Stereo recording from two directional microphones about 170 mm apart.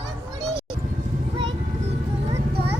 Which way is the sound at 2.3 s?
35° right (ahead or behind).